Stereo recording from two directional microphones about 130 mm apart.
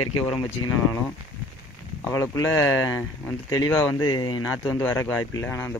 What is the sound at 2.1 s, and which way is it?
Speech, 20° left (ahead or behind).